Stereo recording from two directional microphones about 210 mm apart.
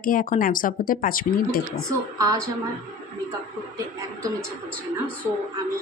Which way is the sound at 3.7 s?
15° right (ahead or behind).